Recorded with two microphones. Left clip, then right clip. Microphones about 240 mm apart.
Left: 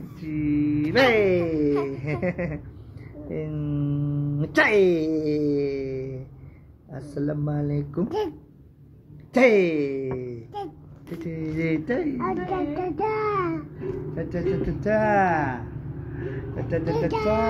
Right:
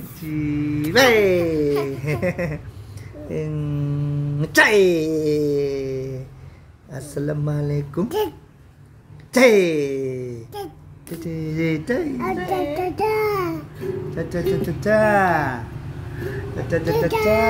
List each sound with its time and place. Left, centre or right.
0.3 s a sound: right
6.9 s speech: right
9.3 s speech: right